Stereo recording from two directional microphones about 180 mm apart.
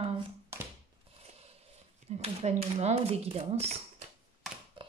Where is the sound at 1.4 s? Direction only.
35° right (ahead or behind).